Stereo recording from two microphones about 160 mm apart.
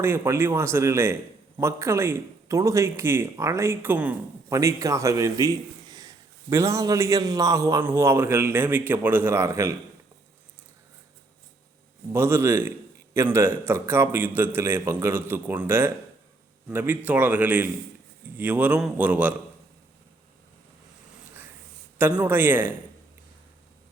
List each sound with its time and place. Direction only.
0.0 s a man's voice: 15° right (ahead or behind)
12.1 s a man's voice: 15° right (ahead or behind)
21.9 s a man's voice: 10° right (ahead or behind)